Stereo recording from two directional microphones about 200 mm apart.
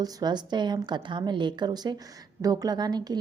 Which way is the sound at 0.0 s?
20° right (ahead or behind).